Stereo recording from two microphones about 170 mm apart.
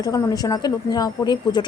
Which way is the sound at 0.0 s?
20° left (ahead or behind).